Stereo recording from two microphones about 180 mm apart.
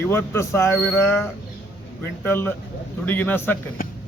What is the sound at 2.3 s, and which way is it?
Speech, 10° left (ahead or behind).